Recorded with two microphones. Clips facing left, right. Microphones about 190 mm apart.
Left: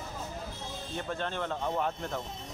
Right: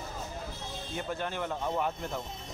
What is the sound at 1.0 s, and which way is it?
Speech, 10° right (ahead or behind).